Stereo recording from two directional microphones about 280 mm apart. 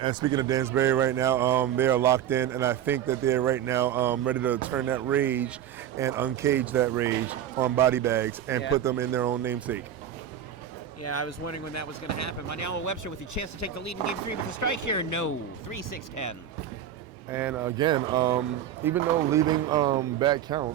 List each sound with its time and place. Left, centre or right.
0.0 s speech: centre
11.0 s speech: left
17.3 s speech: centre